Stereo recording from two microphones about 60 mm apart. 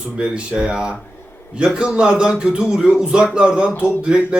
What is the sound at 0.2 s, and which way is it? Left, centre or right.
A man's voice, centre.